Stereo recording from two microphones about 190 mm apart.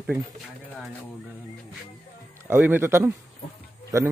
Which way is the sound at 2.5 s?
10° right (ahead or behind).